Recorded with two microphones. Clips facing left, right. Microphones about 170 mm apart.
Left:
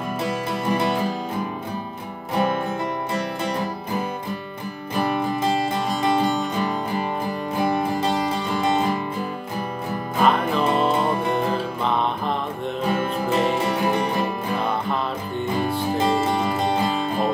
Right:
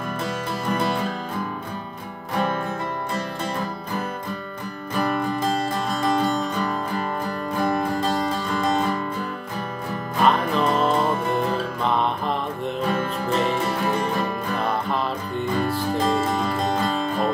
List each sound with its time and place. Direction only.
0.7 s music: 10° left (ahead or behind)
2.3 s music: 15° left (ahead or behind)
4.9 s music: 5° left (ahead or behind)
8.7 s music: 15° left (ahead or behind)
10.2 s music: centre (ahead or behind)